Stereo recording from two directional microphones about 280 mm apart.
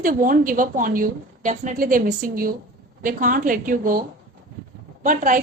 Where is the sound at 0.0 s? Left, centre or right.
Right.